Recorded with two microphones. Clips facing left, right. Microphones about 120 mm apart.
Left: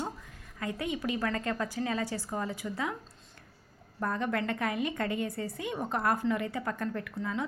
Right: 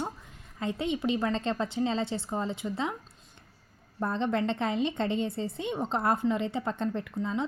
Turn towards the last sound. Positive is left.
turn(degrees=-25)  # may be behind; listen again after turning